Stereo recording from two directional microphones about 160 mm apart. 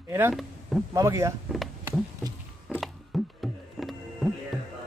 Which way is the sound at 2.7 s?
Centre (ahead or behind).